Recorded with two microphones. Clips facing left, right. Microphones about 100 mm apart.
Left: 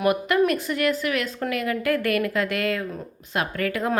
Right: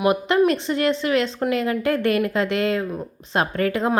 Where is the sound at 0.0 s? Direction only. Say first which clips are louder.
Right 3 dB; 25° right (ahead or behind).